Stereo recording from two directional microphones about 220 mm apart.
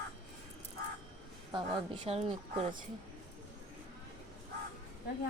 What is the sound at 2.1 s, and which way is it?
Speech, 25° right (ahead or behind).